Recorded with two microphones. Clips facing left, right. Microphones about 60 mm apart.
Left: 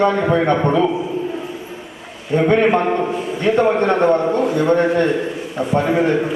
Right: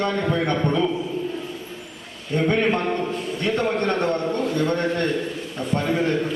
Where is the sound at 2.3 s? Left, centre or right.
Centre.